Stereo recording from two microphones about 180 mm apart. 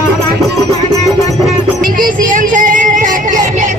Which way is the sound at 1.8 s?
50° right (ahead or behind).